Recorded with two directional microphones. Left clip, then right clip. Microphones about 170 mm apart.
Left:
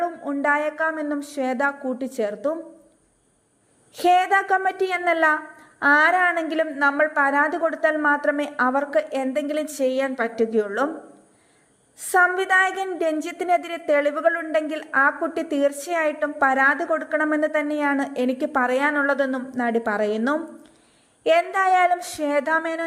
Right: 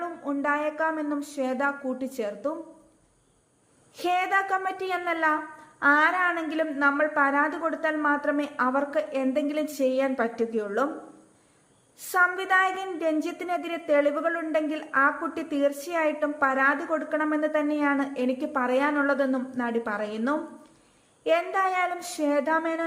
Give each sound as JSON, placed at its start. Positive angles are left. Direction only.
{"t": 0.0, "sound": "a woman's voice", "side_deg": 25}
{"t": 3.9, "sound": "a woman's voice", "side_deg": 30}
{"t": 11.9, "sound": "a woman's voice", "side_deg": 30}